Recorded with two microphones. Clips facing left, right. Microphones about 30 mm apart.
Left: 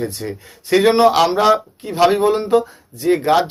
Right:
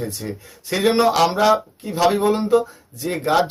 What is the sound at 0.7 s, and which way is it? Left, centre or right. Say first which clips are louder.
Speech: left 5 dB; left.